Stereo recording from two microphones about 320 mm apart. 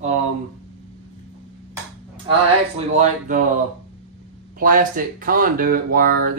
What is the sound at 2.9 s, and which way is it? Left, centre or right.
Speech, right.